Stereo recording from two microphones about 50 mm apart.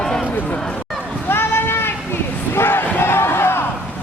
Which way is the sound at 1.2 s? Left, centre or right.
Left.